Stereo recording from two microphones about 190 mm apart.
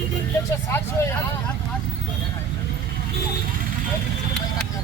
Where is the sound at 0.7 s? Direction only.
10° left (ahead or behind).